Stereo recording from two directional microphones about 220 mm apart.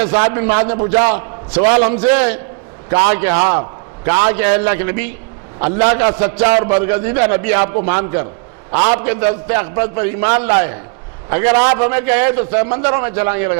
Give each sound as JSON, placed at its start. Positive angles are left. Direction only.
{"t": 0.0, "sound": "a man's voice", "side_deg": -15}